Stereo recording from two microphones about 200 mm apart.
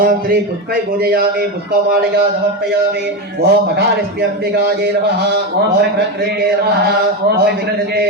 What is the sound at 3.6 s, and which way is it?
Mantra, 50° right (ahead or behind).